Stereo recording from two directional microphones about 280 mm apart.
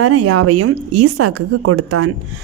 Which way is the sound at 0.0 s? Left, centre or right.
Right.